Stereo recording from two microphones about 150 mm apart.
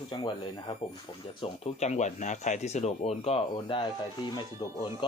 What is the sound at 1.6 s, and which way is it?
Speech, 50° left (ahead or behind).